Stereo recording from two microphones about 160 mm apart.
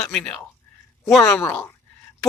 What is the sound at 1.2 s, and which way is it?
Speech, 15° left (ahead or behind).